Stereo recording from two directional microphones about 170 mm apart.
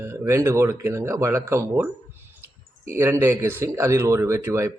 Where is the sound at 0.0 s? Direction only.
15° right (ahead or behind).